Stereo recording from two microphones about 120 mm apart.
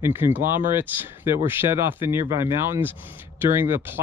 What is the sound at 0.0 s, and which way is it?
Speech, 15° right (ahead or behind).